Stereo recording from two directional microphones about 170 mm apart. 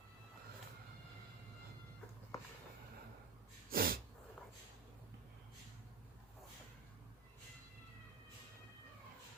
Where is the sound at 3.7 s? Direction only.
60° right (ahead or behind).